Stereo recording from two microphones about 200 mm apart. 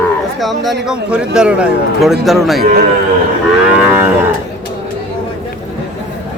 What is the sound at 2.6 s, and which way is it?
Speech, 45° right (ahead or behind).